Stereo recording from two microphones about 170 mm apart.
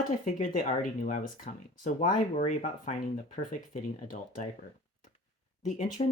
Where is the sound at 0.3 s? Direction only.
50° left (ahead or behind).